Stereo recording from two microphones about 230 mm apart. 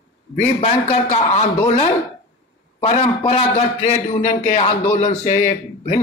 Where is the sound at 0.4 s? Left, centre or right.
Left.